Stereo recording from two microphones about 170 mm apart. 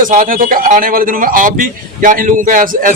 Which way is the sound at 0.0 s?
50° right (ahead or behind).